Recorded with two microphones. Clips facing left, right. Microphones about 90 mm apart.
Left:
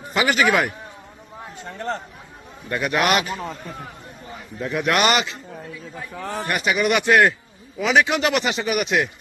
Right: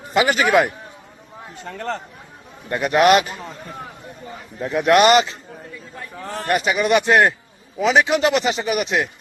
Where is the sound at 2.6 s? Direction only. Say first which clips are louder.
Right 3 dB; 25° right (ahead or behind).